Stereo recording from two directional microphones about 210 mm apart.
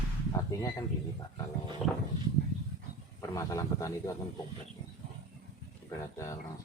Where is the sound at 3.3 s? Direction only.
15° left (ahead or behind).